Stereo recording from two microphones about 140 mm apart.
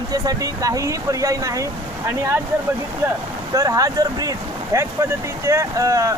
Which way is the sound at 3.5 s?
25° right (ahead or behind).